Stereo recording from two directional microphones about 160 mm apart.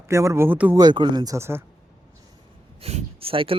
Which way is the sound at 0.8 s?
30° right (ahead or behind).